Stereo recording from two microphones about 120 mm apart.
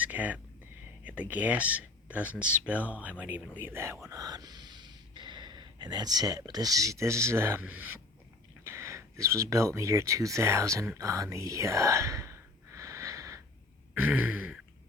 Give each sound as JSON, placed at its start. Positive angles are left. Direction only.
{"t": 0.0, "sound": "a sound", "side_deg": -10}
{"t": 1.0, "sound": "speech", "side_deg": -10}
{"t": 4.1, "sound": "speech", "side_deg": -30}
{"t": 10.9, "sound": "whispering", "side_deg": -25}
{"t": 13.9, "sound": "throat clearing", "side_deg": -15}